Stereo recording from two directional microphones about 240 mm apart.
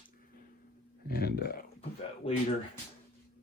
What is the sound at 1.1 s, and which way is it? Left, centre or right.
Speech, left.